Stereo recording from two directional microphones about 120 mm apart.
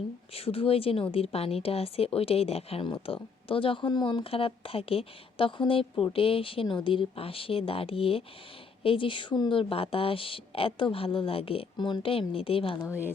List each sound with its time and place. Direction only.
0.3 s a woman's voice: 50° left (ahead or behind)